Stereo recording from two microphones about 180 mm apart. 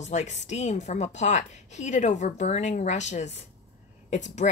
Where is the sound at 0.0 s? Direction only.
40° left (ahead or behind).